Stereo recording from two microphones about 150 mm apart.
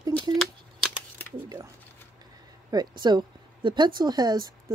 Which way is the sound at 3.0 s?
30° right (ahead or behind).